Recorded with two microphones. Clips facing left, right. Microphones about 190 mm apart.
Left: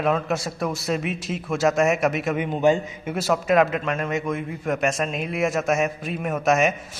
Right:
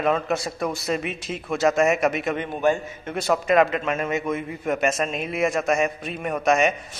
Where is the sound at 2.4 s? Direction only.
15° left (ahead or behind).